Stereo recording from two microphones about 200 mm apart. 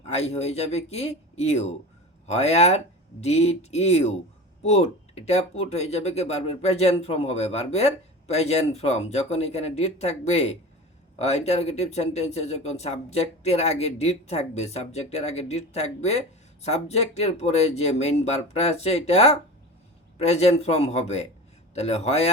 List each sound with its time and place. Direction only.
0.0 s speech: 30° left (ahead or behind)